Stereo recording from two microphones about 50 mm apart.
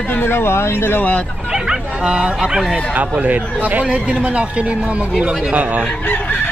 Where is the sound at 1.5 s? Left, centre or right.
Centre.